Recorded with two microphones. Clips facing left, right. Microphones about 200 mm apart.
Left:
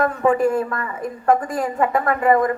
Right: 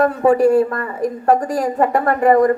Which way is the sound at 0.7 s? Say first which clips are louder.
Right 5 dB; 40° right (ahead or behind).